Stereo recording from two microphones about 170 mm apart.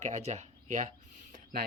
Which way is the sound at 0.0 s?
45° right (ahead or behind).